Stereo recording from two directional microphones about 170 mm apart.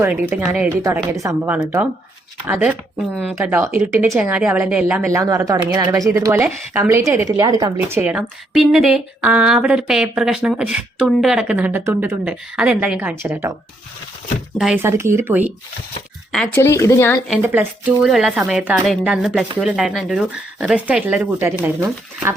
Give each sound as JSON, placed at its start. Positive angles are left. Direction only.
{"t": 0.0, "sound": "a woman's voice", "side_deg": -10}
{"t": 0.8, "sound": "a woman's voice", "side_deg": -20}
{"t": 14.8, "sound": "a woman's voice", "side_deg": -15}
{"t": 16.3, "sound": "speech", "side_deg": 5}
{"t": 16.6, "sound": "speech", "side_deg": 15}
{"t": 17.4, "sound": "a woman's voice", "side_deg": -10}